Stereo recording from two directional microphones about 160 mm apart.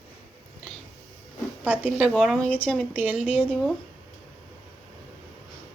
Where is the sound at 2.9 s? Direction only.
10° right (ahead or behind).